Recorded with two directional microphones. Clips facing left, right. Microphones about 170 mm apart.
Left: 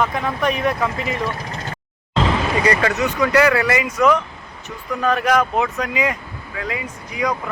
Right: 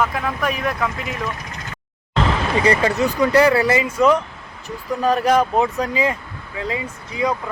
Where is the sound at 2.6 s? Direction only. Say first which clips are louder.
Right 3 dB; 30° right (ahead or behind).